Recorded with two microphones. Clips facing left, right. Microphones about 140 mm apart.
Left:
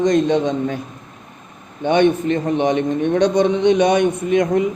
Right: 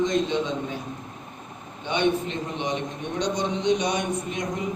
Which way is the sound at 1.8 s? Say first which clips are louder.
Left 9 dB; 55° left (ahead or behind).